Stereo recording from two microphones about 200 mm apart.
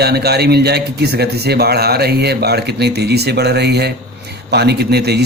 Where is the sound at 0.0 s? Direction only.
55° right (ahead or behind).